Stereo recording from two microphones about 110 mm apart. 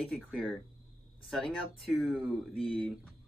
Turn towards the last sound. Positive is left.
turn(degrees=0)  # may be behind; listen again after turning